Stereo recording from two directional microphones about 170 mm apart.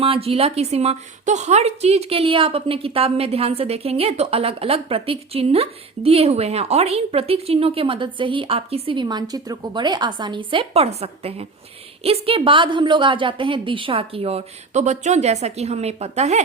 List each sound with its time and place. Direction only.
0.0 s a woman's voice: 35° right (ahead or behind)